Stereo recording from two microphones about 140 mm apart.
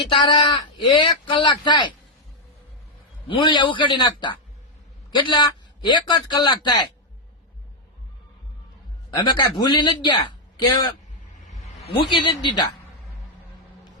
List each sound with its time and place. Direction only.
0.0 s speech: 35° left (ahead or behind)
3.2 s speech: 35° left (ahead or behind)
9.0 s speech: 30° left (ahead or behind)